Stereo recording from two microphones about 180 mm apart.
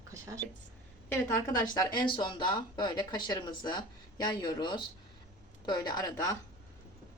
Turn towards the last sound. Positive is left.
turn(degrees=20)  # may be behind; listen again after turning